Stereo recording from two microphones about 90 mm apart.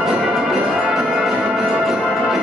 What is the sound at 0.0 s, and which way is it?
Music, 5° right (ahead or behind).